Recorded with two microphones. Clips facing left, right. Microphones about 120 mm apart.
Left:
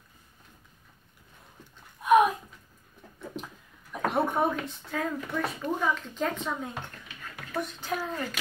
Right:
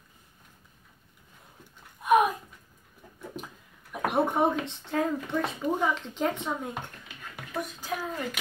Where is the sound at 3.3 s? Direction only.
10° right (ahead or behind).